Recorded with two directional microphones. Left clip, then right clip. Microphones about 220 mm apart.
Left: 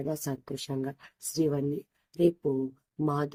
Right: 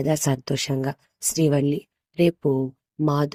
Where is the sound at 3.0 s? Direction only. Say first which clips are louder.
Right 7 dB; 35° right (ahead or behind).